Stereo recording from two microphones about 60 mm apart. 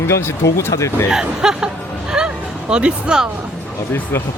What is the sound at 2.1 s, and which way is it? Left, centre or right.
Music, centre.